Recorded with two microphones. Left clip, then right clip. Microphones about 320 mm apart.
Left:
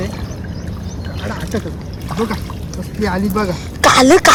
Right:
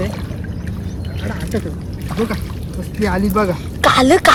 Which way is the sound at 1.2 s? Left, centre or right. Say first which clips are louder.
Left 1 dB; centre.